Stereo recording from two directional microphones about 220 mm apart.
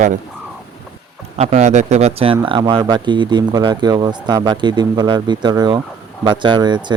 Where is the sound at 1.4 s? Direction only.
30° right (ahead or behind).